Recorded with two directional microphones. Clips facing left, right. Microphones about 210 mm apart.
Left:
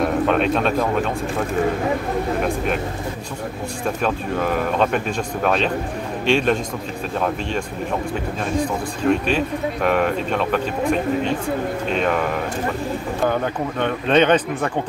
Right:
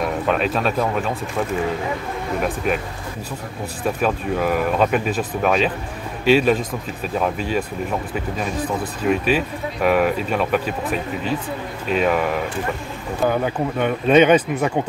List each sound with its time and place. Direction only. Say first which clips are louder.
0.3 s speech: left 2 dB; centre (ahead or behind)
2.4 s speech: even; 5° right (ahead or behind)
3.8 s speech: right 2 dB; 5° right (ahead or behind)
13.2 s speech: right 2 dB; 5° right (ahead or behind)